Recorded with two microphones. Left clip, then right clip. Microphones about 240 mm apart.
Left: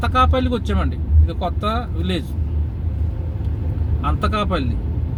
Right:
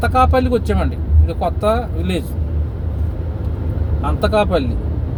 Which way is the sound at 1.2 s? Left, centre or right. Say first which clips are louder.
Right 6 dB; right.